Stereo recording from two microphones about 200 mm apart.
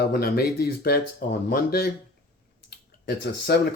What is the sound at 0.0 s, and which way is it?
Speech, 50° left (ahead or behind).